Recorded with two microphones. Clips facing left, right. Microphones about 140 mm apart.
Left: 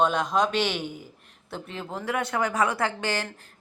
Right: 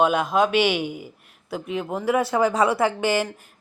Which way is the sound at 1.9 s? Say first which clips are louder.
Right 6 dB; 25° right (ahead or behind).